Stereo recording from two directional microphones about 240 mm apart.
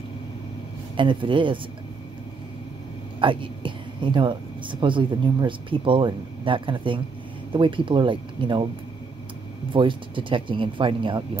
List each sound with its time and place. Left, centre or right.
0.9 s speech: right
3.2 s speech: right
9.7 s speech: right